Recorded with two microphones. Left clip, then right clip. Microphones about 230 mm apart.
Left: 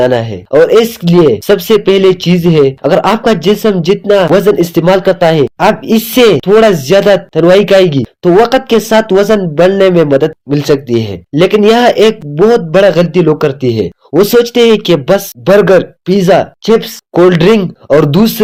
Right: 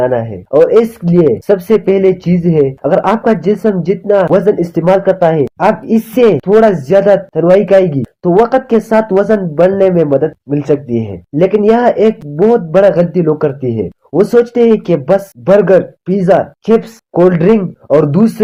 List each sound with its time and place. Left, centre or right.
0.0 s a man's voice: left